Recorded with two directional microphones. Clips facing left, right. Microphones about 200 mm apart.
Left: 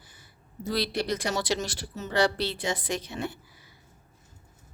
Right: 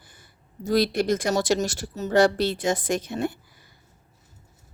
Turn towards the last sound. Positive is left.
turn(degrees=-50)  # may be behind; listen again after turning